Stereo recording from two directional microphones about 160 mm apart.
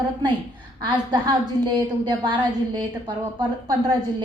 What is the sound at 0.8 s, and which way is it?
A woman's voice, 30° right (ahead or behind).